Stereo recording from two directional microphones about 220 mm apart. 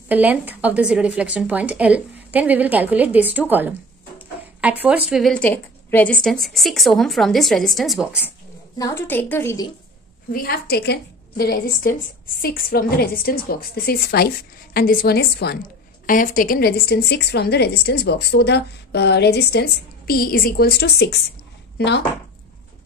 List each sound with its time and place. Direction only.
0.1 s a woman's voice: 5° right (ahead or behind)
8.7 s a woman's voice: 15° left (ahead or behind)
10.3 s a woman's voice: 45° left (ahead or behind)